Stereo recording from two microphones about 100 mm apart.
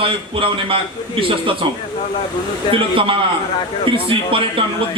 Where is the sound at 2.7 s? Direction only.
60° right (ahead or behind).